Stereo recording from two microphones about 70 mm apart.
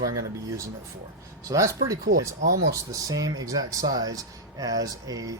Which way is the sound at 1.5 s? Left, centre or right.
Right.